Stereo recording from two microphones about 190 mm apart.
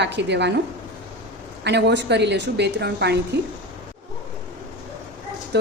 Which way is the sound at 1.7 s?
60° right (ahead or behind).